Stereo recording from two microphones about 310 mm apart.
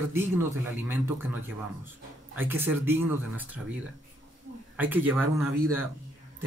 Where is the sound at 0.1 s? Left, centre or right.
Centre.